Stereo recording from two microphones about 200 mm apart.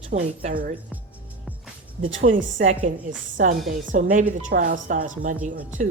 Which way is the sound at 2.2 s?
40° right (ahead or behind).